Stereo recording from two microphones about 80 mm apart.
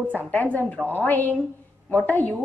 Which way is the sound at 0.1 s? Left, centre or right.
Centre.